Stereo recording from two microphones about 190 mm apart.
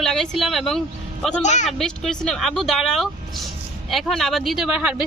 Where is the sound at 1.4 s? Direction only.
40° left (ahead or behind).